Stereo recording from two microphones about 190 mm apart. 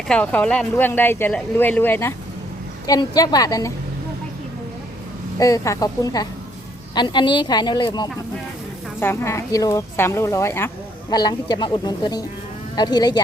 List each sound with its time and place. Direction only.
0.1 s a woman's voice: 5° left (ahead or behind)
5.4 s a woman's voice: 15° left (ahead or behind)
9.0 s a woman's voice: 10° left (ahead or behind)